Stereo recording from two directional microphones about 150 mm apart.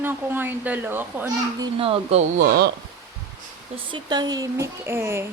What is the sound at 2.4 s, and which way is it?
Speech, 90° right.